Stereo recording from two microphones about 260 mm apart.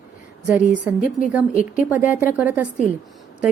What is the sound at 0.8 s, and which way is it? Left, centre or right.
A woman's voice, centre.